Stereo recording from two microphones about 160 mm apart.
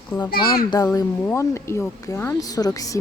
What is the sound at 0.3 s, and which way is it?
Speech, 70° left (ahead or behind).